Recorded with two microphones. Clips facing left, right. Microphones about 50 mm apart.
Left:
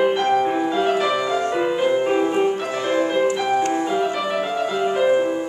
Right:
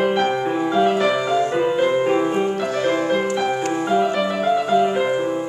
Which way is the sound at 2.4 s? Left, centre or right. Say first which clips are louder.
Even; left.